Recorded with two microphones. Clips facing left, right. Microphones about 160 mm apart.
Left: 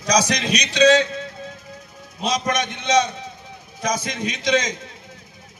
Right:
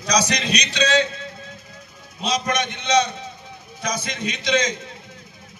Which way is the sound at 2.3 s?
45° left (ahead or behind).